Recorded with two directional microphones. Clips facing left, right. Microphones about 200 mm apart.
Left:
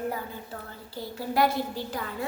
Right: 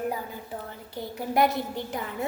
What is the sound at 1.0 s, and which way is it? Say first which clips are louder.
A child's voice: right 1 dB; 20° right (ahead or behind).